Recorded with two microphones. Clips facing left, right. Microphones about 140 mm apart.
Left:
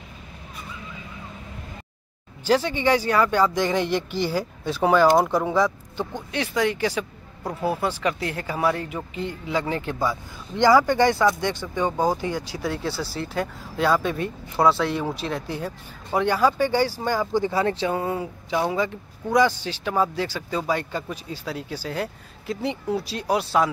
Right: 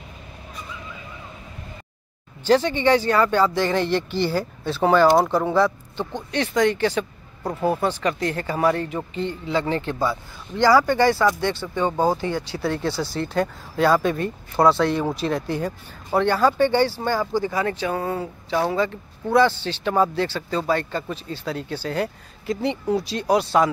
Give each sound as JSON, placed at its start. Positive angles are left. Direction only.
{"t": 2.4, "sound": "speech", "side_deg": 10}